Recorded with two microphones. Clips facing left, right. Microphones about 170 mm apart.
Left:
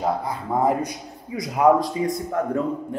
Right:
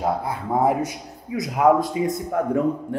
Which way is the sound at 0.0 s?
5° right (ahead or behind).